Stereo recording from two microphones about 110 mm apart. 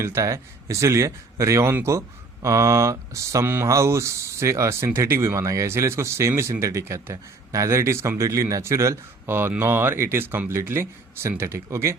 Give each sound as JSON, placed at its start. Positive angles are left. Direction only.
{"t": 0.0, "sound": "speech", "side_deg": -25}